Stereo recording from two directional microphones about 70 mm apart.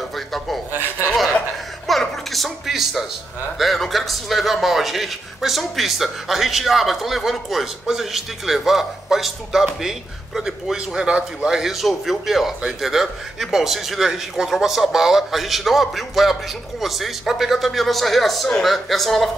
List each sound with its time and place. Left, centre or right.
0.1 s speech: centre
0.7 s speech: right
1.9 s music: centre
3.5 s speech: centre